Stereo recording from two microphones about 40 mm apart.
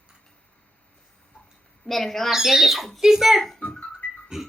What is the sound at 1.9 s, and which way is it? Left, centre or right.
Speech, centre.